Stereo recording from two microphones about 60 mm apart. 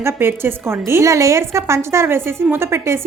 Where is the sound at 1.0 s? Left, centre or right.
Right.